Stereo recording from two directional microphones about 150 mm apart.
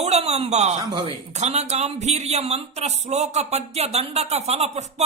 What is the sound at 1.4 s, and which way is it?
Speech, 45° right (ahead or behind).